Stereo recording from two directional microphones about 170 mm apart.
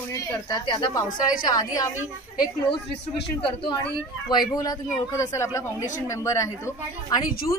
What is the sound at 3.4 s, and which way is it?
Speech, 30° left (ahead or behind).